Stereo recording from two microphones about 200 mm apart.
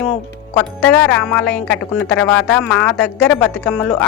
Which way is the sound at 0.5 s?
10° left (ahead or behind).